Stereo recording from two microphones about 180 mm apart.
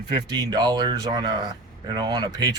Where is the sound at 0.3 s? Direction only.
20° right (ahead or behind).